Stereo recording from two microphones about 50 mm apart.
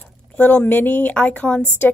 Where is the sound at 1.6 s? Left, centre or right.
Left.